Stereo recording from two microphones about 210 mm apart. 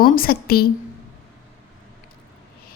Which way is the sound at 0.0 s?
45° left (ahead or behind).